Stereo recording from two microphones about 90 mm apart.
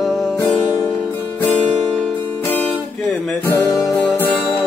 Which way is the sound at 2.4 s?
20° left (ahead or behind).